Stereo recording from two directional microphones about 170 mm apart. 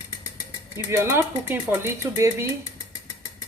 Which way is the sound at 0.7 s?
15° right (ahead or behind).